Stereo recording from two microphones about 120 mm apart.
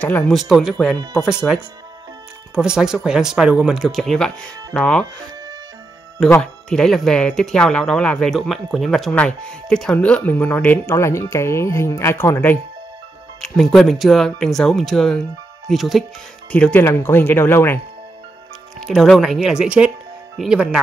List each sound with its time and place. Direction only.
0.3 s speech: centre (ahead or behind)
2.5 s speech: 5° right (ahead or behind)
6.4 s speech: 5° left (ahead or behind); by 12.5 s 20° left (ahead or behind)
13.4 s speech: 5° left (ahead or behind)
16.5 s speech: 15° left (ahead or behind)
18.8 s speech: centre (ahead or behind)